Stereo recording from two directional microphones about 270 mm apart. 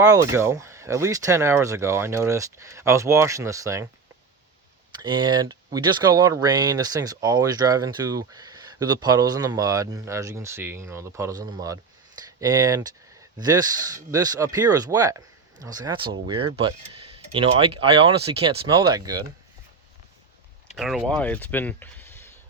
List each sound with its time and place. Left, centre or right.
0.0 s speech: centre
4.9 s speech: centre
20.7 s speech: centre